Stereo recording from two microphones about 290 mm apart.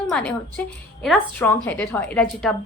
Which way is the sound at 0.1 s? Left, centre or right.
Centre.